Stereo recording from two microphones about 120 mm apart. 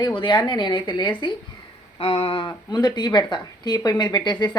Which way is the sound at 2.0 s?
55° left (ahead or behind).